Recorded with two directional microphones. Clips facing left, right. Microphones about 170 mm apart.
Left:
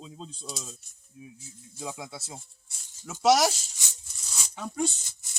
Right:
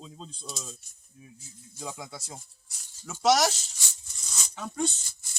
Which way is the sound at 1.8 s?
5° left (ahead or behind).